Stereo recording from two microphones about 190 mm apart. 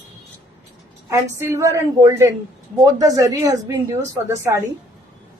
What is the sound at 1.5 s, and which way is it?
A woman's voice, 15° right (ahead or behind).